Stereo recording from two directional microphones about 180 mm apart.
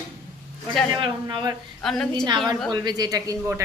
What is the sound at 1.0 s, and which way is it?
Speech, 25° right (ahead or behind).